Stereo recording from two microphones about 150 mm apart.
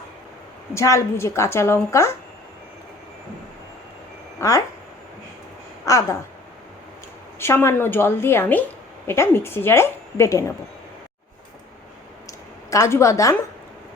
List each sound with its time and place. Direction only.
0.7 s a woman's voice: 20° left (ahead or behind)
4.4 s speech: 20° left (ahead or behind)
5.8 s speech: 20° left (ahead or behind)
7.3 s a woman's voice: 15° left (ahead or behind)
12.7 s a woman's voice: 20° left (ahead or behind)